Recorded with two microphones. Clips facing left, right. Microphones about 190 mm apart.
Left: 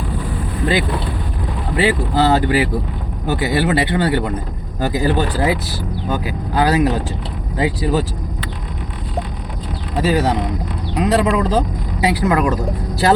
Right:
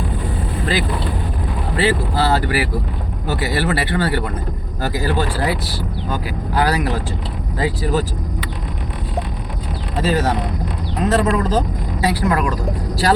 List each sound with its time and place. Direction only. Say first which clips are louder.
0.6 s vehicle: left 4 dB; 20° left (ahead or behind)
1.7 s speech: left 2 dB; 15° left (ahead or behind)
10.0 s speech: left 2 dB; 15° left (ahead or behind)